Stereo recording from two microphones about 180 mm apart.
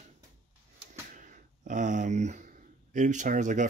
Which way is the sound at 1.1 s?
45° right (ahead or behind).